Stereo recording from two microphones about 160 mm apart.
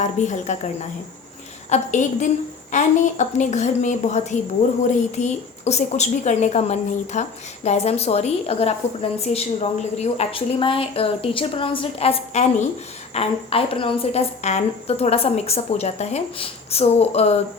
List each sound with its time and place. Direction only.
0.0 s a woman's voice: 50° left (ahead or behind)